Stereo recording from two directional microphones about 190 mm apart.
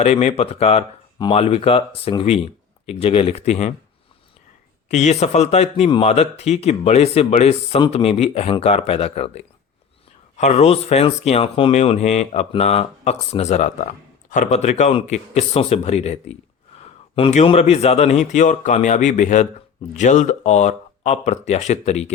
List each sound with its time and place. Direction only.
0.0 s speech: 35° left (ahead or behind)
4.9 s speech: 35° left (ahead or behind)